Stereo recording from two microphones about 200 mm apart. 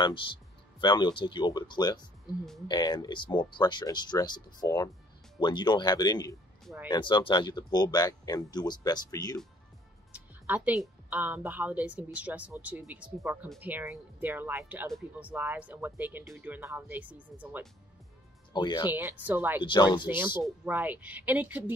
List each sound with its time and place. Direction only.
0.7 s speech: 20° left (ahead or behind)
10.1 s a woman's voice: 10° right (ahead or behind)
18.5 s speech: 20° left (ahead or behind)
18.9 s a woman's voice: 10° right (ahead or behind)
19.6 s speech: 25° left (ahead or behind)
20.4 s a woman's voice: 5° right (ahead or behind)